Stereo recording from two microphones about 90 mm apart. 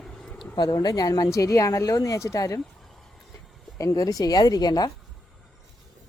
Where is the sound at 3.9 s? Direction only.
45° left (ahead or behind).